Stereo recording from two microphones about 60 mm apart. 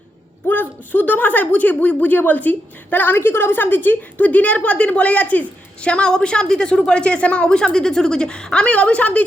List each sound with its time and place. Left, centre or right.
0.4 s speech: left